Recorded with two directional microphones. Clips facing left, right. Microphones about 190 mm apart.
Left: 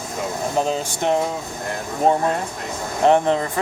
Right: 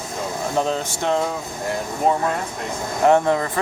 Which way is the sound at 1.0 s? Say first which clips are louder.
Left 2 dB; 15° left (ahead or behind).